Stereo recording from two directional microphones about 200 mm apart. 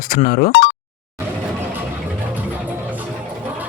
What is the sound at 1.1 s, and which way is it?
Vehicle, 10° right (ahead or behind).